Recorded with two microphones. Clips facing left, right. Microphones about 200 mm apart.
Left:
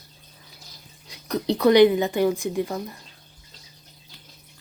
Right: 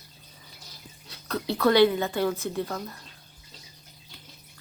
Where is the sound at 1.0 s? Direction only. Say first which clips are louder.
Left 6 dB; 15° left (ahead or behind).